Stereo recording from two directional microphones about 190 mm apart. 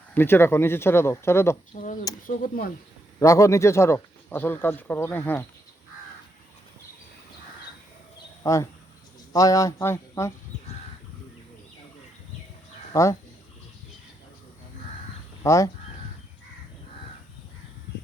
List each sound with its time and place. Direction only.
0.1 s speech: 10° left (ahead or behind)
1.7 s speech: 45° left (ahead or behind)
3.2 s speech: 15° left (ahead or behind)
8.4 s speech: 15° left (ahead or behind)
12.9 s speech: 15° left (ahead or behind)
15.4 s speech: 15° left (ahead or behind)